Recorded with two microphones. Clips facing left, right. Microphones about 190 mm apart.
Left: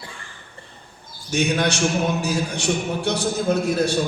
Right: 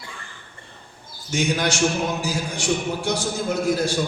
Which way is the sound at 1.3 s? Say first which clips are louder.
Left 2 dB; 65° left (ahead or behind).